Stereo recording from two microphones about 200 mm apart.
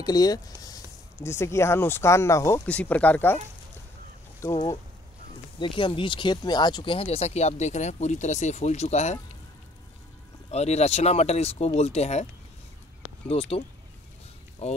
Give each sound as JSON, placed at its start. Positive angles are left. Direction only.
{"t": 0.0, "sound": "a sound", "side_deg": 20}
{"t": 1.2, "sound": "speech", "side_deg": 15}
{"t": 5.6, "sound": "speech", "side_deg": 25}
{"t": 10.5, "sound": "speech", "side_deg": 35}
{"t": 13.3, "sound": "speech", "side_deg": 30}